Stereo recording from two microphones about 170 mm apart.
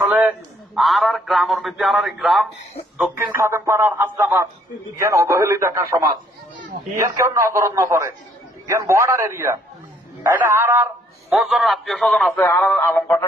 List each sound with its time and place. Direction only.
0.0 s a man's voice: 10° right (ahead or behind)
3.3 s speech: 15° right (ahead or behind)
11.3 s a man's voice: centre (ahead or behind)
12.4 s speech: 10° left (ahead or behind)